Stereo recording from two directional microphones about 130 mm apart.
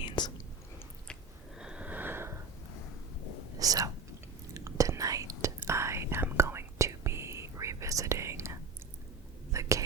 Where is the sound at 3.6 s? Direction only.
25° right (ahead or behind).